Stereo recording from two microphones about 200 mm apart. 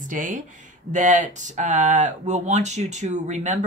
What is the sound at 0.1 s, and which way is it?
Speech, 40° right (ahead or behind).